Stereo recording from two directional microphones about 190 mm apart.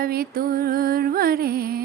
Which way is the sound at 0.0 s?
50° right (ahead or behind).